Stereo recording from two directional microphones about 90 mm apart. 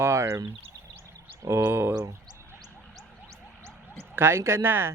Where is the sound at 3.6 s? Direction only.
25° right (ahead or behind).